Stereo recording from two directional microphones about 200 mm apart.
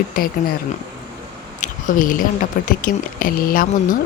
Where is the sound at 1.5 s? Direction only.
40° left (ahead or behind).